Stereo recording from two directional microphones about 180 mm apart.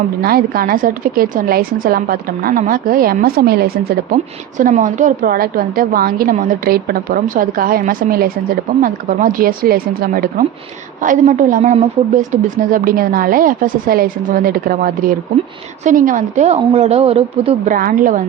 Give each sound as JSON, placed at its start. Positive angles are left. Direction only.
{"t": 0.2, "sound": "a woman's voice", "side_deg": -55}
{"t": 17.7, "sound": "a woman's voice", "side_deg": -50}